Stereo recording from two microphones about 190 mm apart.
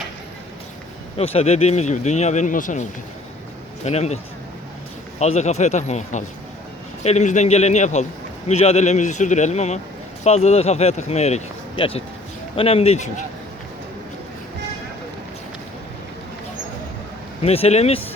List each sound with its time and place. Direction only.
1.2 s speech: 30° left (ahead or behind)
3.8 s speech: 35° left (ahead or behind)
5.2 s speech: 35° left (ahead or behind)
17.4 s speech: 30° left (ahead or behind)